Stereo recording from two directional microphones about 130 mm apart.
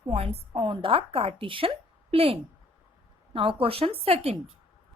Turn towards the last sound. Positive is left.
turn(degrees=-50)  # may be behind; listen again after turning